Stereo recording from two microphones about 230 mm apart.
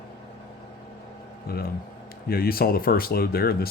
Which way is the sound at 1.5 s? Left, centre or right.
Left.